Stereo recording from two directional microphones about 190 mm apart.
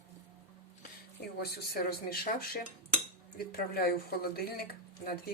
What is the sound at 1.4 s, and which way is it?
Cutlery, 50° left (ahead or behind).